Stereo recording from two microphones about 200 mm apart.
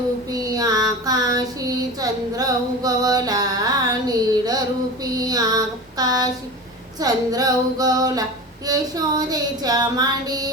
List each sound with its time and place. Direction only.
0.3 s child singing: 20° right (ahead or behind)